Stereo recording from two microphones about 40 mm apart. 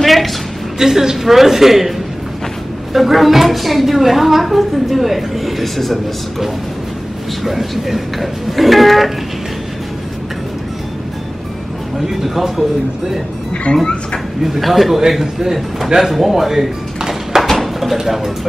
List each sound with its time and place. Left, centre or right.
0.0 s a sound: centre
0.7 s a man's voice: centre
7.4 s a woman's voice: centre
12.1 s a man's voice: centre
13.7 s speech: left
14.4 s a woman's voice: centre
17.4 s a sound: centre